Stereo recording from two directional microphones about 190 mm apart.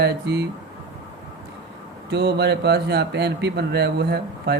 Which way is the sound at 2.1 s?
60° right (ahead or behind).